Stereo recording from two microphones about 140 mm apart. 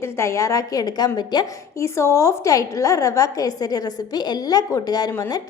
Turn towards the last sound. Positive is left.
turn(degrees=25)  # may be behind; listen again after turning